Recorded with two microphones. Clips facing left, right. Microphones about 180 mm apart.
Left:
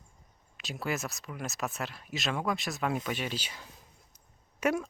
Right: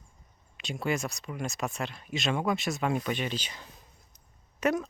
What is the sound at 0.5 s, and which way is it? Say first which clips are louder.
Speech: right 3 dB; centre (ahead or behind).